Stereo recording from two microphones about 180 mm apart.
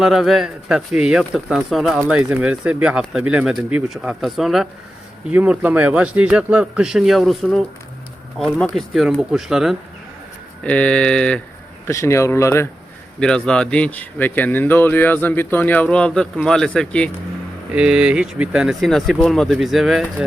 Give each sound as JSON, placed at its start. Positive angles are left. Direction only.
{"t": 0.0, "sound": "speech", "side_deg": 0}
{"t": 11.9, "sound": "speech", "side_deg": 15}